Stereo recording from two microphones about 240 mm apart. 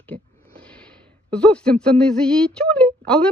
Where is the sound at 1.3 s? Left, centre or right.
Centre.